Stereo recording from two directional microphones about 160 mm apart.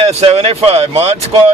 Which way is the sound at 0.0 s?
40° right (ahead or behind).